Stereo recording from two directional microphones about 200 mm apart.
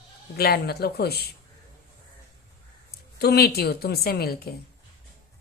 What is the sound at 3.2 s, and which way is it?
A woman's voice, 50° left (ahead or behind).